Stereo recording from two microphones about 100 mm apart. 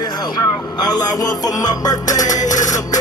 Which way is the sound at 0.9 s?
40° left (ahead or behind).